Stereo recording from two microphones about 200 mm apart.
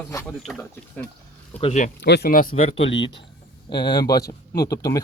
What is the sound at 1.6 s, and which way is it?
Speech, 35° left (ahead or behind).